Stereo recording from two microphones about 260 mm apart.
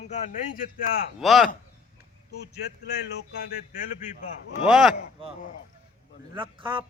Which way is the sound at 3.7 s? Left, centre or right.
Left.